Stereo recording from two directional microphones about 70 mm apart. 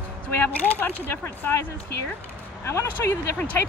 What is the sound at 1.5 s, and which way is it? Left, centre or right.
Speech, left.